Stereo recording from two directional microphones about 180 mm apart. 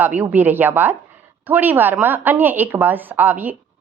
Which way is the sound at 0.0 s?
10° right (ahead or behind).